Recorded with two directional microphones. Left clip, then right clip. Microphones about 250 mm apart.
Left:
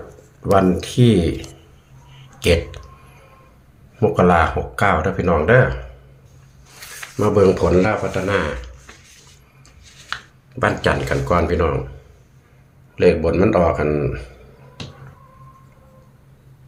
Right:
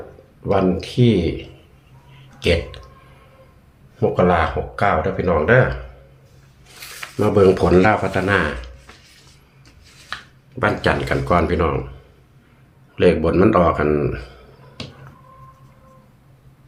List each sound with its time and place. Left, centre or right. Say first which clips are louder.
0.5 s speech: left 3 dB; centre
2.4 s speech: left 2 dB; centre
4.0 s speech: left 2 dB; centre
7.2 s speech: even; centre
10.1 s a sound: left 3 dB; centre
10.6 s speech: even; centre
13.0 s speech: even; centre